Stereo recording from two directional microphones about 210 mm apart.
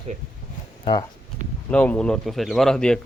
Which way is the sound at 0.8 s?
20° left (ahead or behind).